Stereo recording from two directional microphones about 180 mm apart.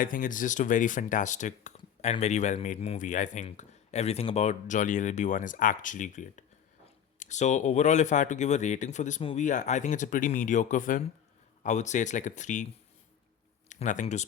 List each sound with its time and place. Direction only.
0.0 s speech: 50° left (ahead or behind)
13.7 s speech: 45° left (ahead or behind)